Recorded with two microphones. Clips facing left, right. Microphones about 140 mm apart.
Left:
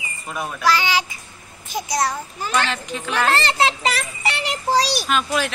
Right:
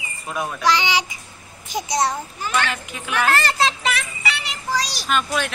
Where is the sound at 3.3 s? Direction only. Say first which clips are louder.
Left 1 dB; 30° left (ahead or behind).